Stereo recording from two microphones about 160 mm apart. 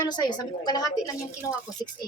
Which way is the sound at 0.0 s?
25° left (ahead or behind).